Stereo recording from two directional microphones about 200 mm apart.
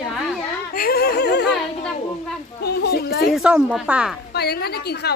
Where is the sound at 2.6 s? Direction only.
55° left (ahead or behind).